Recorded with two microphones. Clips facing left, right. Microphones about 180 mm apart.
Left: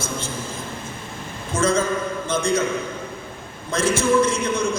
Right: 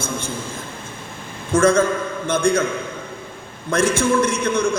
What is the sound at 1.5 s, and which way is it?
A man's voice, 55° right (ahead or behind).